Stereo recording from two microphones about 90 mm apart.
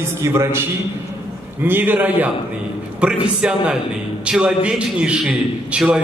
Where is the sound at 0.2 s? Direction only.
30° right (ahead or behind).